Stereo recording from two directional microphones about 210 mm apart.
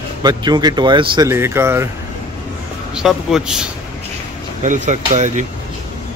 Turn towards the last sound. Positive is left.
turn(degrees=-35)  # may be behind; listen again after turning